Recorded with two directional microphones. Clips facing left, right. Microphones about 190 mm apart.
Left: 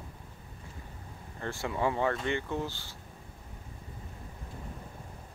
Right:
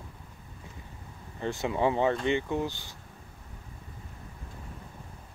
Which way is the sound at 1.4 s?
20° right (ahead or behind).